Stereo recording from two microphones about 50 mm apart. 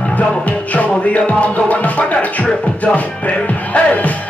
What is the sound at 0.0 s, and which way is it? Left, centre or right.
Music, centre.